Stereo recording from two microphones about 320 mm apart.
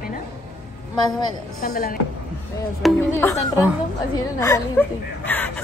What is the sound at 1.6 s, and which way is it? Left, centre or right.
Speech, left.